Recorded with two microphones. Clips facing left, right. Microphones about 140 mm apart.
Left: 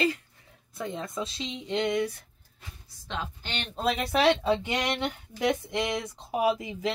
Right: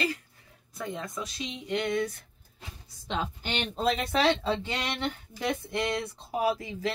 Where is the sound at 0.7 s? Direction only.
25° left (ahead or behind).